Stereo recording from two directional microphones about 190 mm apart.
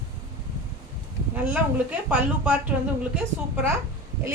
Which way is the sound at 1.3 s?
10° right (ahead or behind).